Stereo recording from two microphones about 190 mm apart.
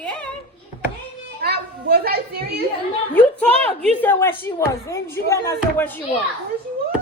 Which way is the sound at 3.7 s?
10° left (ahead or behind).